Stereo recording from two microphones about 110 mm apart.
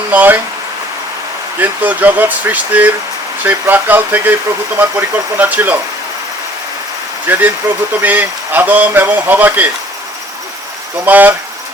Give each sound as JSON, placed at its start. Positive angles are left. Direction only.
{"t": 0.1, "sound": "speech", "side_deg": -15}
{"t": 1.5, "sound": "speech", "side_deg": -15}
{"t": 7.3, "sound": "speech", "side_deg": -20}
{"t": 11.0, "sound": "speech", "side_deg": -15}